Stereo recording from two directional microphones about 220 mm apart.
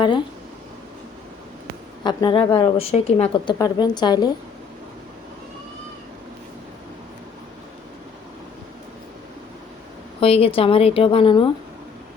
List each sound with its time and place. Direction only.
0.0 s a woman's voice: 20° left (ahead or behind)
2.0 s a woman's voice: 20° left (ahead or behind)
10.2 s a woman's voice: 25° left (ahead or behind)